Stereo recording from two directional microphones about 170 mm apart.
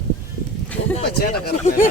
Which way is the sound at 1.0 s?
65° left (ahead or behind).